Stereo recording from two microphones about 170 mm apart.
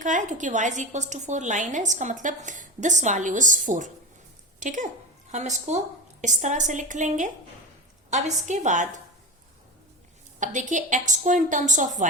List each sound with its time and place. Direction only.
0.0 s a woman's voice: 45° right (ahead or behind)
10.4 s a woman's voice: 45° right (ahead or behind)